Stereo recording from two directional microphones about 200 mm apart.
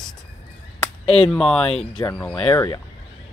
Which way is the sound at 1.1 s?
25° left (ahead or behind).